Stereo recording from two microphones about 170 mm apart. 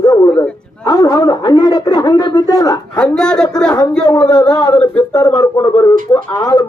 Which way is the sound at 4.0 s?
25° left (ahead or behind).